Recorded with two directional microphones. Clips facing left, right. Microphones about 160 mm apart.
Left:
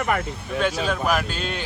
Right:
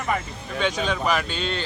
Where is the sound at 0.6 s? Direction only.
5° left (ahead or behind).